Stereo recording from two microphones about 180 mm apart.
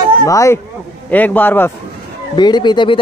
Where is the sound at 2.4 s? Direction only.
25° left (ahead or behind).